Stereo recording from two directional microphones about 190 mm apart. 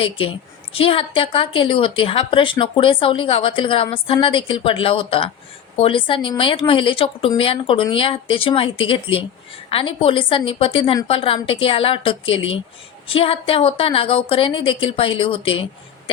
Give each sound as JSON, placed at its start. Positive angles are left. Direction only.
{"t": 0.0, "sound": "a woman's voice", "side_deg": 30}